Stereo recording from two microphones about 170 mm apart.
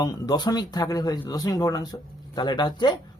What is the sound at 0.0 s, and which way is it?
Speech, 20° left (ahead or behind).